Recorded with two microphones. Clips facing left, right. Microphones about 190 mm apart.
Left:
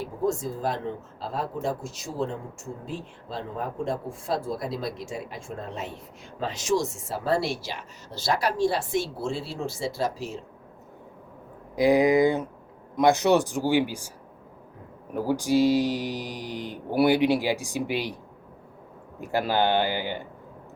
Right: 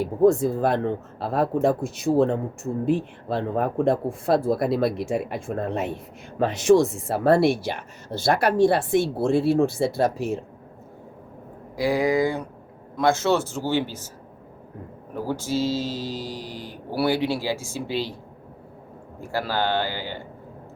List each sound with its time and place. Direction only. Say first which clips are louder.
0.0 s speech: right 9 dB; 60° right (ahead or behind)
11.8 s a man's voice: left 2 dB; 20° left (ahead or behind)
13.0 s mantra: left 1 dB; 15° left (ahead or behind)
15.2 s mantra: left 4 dB; 15° left (ahead or behind)
19.2 s a man's voice: left 2 dB; 20° left (ahead or behind)